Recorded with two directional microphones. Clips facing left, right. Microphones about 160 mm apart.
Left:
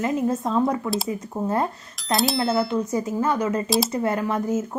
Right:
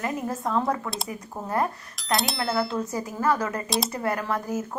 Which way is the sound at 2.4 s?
25° left (ahead or behind).